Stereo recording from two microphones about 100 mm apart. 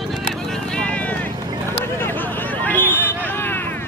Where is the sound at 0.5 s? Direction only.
10° left (ahead or behind).